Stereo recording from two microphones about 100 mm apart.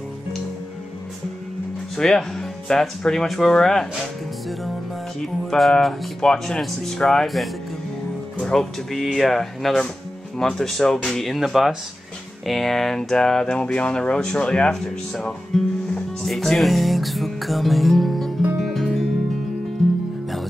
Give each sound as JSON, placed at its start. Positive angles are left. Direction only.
{"t": 2.0, "sound": "speech", "side_deg": 5}
{"t": 3.9, "sound": "music", "side_deg": 0}
{"t": 5.2, "sound": "speech", "side_deg": 5}
{"t": 18.6, "sound": "music", "side_deg": 0}